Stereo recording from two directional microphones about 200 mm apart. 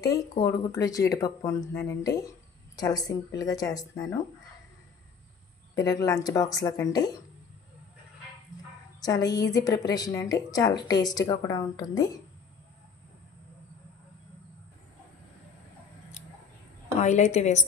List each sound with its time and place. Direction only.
0.4 s a woman's voice: 15° left (ahead or behind)
5.8 s speech: 15° left (ahead or behind)
9.0 s a woman's voice: 20° left (ahead or behind)
17.0 s a woman's voice: 35° left (ahead or behind)